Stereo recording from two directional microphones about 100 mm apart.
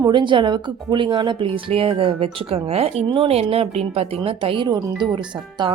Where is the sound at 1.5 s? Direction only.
70° right (ahead or behind).